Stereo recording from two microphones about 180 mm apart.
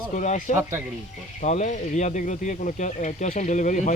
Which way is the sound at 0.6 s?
10° right (ahead or behind).